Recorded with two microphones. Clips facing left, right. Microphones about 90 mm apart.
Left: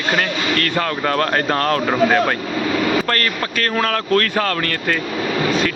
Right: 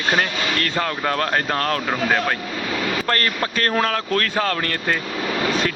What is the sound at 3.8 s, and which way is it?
Speech, 15° right (ahead or behind).